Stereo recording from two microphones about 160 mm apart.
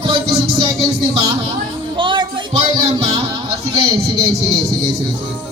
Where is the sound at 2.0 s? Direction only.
30° right (ahead or behind).